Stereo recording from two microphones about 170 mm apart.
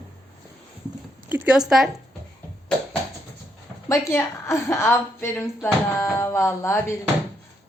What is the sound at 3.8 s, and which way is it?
Speech, 15° left (ahead or behind).